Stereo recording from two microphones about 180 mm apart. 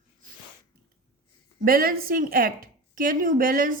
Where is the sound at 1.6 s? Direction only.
55° right (ahead or behind).